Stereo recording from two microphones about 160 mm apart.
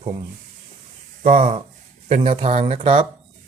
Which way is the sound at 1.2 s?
50° right (ahead or behind).